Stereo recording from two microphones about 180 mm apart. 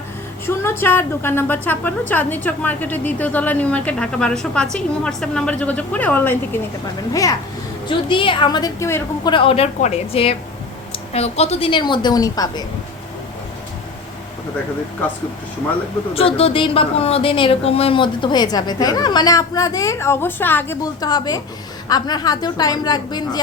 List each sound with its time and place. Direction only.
0.4 s a woman's voice: 15° left (ahead or behind)
9.3 s a woman's voice: 30° left (ahead or behind)
16.1 s speech: 30° left (ahead or behind); by 20.7 s 10° left (ahead or behind)
21.0 s speech: 20° left (ahead or behind)